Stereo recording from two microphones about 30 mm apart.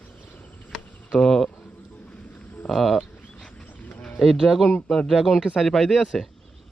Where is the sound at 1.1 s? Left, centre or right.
Centre.